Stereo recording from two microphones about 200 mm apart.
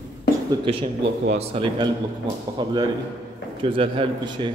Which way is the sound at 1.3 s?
25° right (ahead or behind).